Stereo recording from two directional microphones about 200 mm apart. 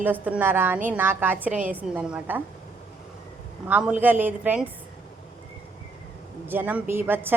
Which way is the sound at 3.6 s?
5° right (ahead or behind).